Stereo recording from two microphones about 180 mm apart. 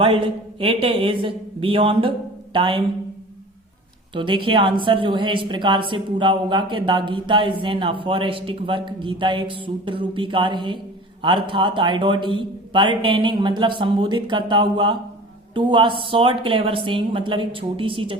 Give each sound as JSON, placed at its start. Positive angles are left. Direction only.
{"t": 0.6, "sound": "a woman's voice", "side_deg": -30}
{"t": 4.1, "sound": "a woman's voice", "side_deg": -30}